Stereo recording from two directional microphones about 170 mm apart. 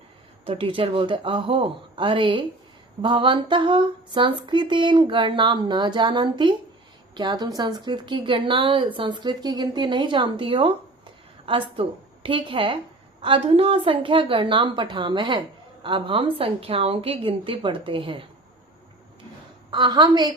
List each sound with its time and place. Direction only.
0.4 s a woman's voice: 35° right (ahead or behind)
19.7 s a woman's voice: 25° right (ahead or behind)